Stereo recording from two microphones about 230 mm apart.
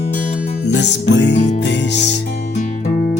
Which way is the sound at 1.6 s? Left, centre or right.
Left.